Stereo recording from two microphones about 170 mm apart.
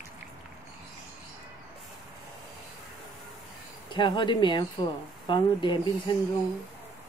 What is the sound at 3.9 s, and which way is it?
Speech, 25° left (ahead or behind).